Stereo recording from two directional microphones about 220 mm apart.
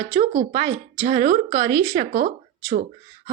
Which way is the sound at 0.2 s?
30° right (ahead or behind).